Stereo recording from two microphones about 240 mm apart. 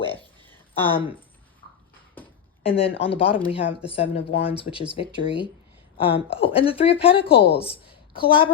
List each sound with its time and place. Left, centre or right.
0.7 s speech: left
2.6 s a woman's voice: left